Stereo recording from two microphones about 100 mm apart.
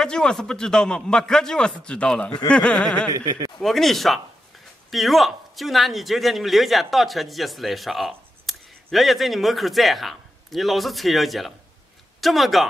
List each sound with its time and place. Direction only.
0.0 s a man's voice: 5° left (ahead or behind)
3.1 s speech: 40° right (ahead or behind)
3.6 s speech: centre (ahead or behind)